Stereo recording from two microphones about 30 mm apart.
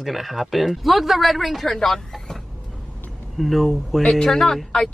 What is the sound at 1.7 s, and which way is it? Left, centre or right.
Speech, centre.